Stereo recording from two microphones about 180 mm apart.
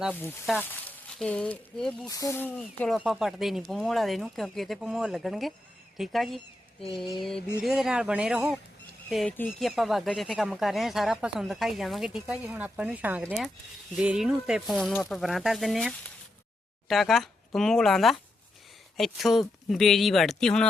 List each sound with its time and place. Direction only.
0.6 s speech: 10° left (ahead or behind)
2.0 s speech: 20° left (ahead or behind); by 6.4 s centre (ahead or behind)
6.9 s a sound: 25° left (ahead or behind)
7.2 s speech: centre (ahead or behind)